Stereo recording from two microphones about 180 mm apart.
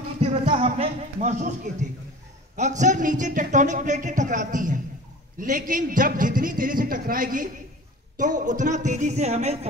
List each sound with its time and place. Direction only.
0.2 s a man's voice: 30° right (ahead or behind)